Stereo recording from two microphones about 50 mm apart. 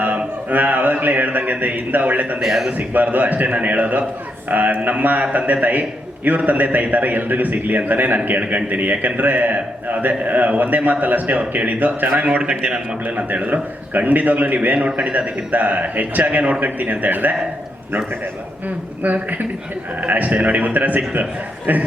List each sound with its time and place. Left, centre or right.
0.0 s a man's voice: right
2.4 s a man's voice: centre
2.7 s a man's voice: right
12.4 s a man's voice: centre
13.1 s a man's voice: right
19.0 s a man's voice: right